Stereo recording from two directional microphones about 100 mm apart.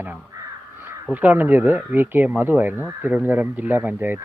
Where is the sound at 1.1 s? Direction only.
20° right (ahead or behind).